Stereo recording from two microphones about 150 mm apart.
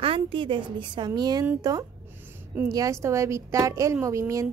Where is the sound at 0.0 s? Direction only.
35° right (ahead or behind).